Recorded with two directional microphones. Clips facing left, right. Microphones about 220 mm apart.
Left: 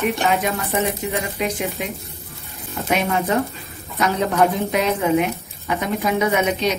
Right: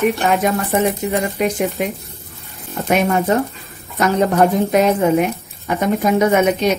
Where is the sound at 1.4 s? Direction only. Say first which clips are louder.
Right 5 dB; 45° right (ahead or behind).